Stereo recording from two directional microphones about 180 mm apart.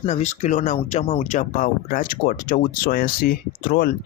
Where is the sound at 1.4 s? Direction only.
50° left (ahead or behind).